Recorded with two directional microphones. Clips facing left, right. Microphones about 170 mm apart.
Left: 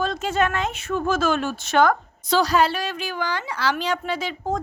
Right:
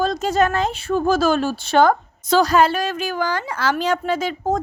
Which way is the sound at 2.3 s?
50° right (ahead or behind).